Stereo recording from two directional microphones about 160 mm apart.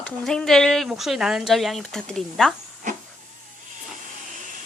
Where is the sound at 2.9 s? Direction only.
50° right (ahead or behind).